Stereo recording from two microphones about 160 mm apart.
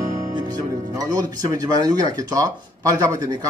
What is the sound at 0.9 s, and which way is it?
Speech, 20° right (ahead or behind).